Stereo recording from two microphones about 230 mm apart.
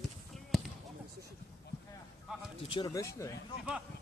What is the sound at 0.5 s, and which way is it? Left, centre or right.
Basketball bounce, centre.